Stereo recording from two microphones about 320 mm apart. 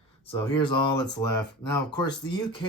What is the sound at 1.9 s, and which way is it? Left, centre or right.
Speech, centre.